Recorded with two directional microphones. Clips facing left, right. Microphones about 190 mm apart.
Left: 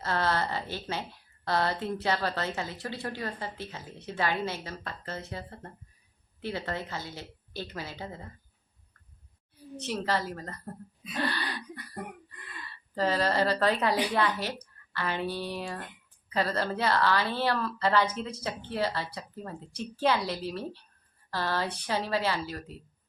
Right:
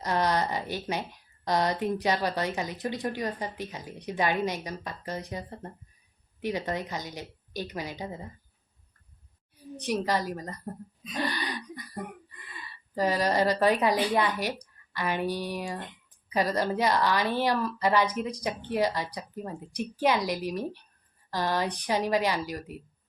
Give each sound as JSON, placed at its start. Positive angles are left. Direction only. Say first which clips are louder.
{"t": 0.0, "sound": "speech", "louder": "right 2 dB", "side_deg": -15}
{"t": 9.7, "sound": "speech", "louder": "right 3 dB", "side_deg": -15}
{"t": 11.1, "sound": "gasp", "louder": "right 1 dB", "side_deg": -15}
{"t": 12.5, "sound": "speech", "louder": "right 2 dB", "side_deg": -15}